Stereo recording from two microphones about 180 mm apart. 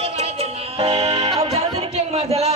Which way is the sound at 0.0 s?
35° right (ahead or behind).